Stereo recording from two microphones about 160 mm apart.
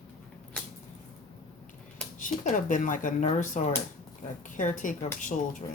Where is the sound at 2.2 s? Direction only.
55° left (ahead or behind).